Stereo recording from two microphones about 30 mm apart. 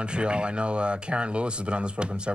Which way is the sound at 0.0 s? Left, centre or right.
Right.